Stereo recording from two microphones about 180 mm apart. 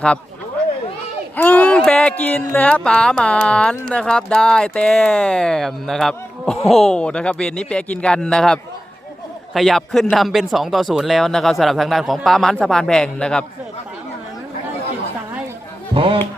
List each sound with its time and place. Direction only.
1.4 s speech: 5° left (ahead or behind)
16.0 s speech: 30° right (ahead or behind)